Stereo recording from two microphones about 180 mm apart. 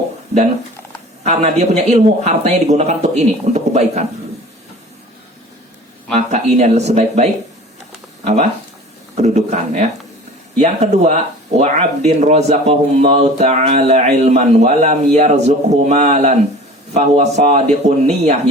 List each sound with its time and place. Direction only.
1.2 s speech: 40° right (ahead or behind)
6.1 s speech: 40° right (ahead or behind)